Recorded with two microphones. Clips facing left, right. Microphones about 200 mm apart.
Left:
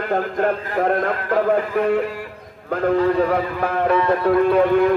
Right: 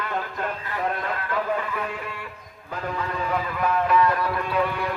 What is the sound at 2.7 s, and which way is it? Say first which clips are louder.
Music: left 13 dB; 60° left (ahead or behind).